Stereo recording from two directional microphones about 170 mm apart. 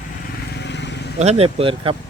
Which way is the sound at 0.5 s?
85° left.